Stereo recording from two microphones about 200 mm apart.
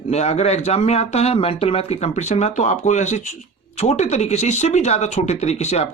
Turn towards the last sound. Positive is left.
turn(degrees=35)  # may be behind; listen again after turning